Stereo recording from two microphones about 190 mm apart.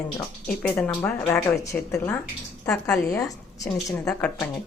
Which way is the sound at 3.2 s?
20° left (ahead or behind).